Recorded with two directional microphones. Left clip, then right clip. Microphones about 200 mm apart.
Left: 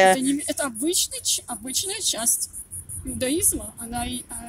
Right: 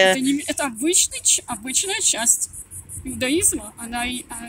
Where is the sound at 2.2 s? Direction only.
25° left (ahead or behind).